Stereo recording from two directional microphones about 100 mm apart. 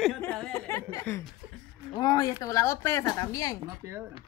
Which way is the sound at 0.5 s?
25° left (ahead or behind).